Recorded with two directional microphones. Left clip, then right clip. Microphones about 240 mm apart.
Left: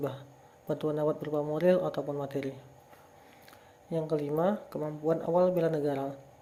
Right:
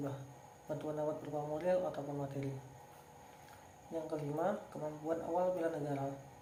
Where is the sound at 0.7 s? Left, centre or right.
Left.